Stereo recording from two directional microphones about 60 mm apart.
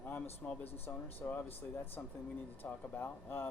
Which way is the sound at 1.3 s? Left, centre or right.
Left.